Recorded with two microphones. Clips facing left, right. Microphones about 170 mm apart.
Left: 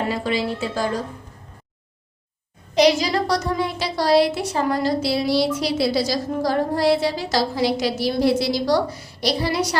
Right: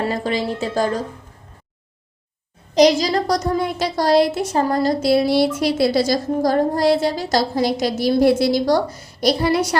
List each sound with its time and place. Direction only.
0.1 s a woman's voice: 45° right (ahead or behind)
2.7 s a woman's voice: 40° right (ahead or behind)